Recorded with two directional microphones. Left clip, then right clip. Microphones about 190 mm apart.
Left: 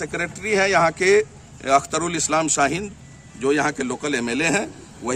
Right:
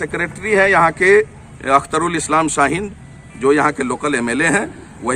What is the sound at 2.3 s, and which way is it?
Speech, 50° left (ahead or behind).